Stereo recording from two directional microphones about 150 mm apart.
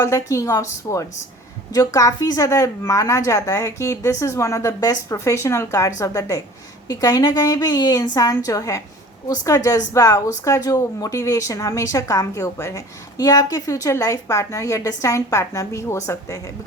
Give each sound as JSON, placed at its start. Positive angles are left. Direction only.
{"t": 0.0, "sound": "speech", "side_deg": 20}